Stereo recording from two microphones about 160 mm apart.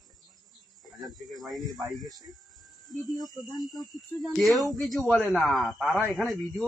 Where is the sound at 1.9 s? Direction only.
25° right (ahead or behind).